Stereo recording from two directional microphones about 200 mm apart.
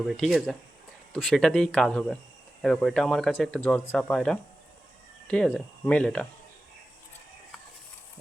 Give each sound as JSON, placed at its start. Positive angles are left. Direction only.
{"t": 0.1, "sound": "speech", "side_deg": 0}